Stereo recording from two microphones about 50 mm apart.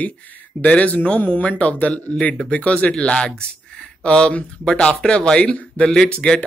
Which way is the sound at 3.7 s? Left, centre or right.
Centre.